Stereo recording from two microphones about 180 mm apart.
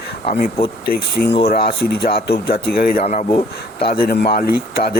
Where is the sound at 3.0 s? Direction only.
40° left (ahead or behind).